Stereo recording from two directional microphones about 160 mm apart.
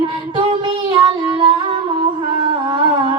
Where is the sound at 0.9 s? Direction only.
30° right (ahead or behind).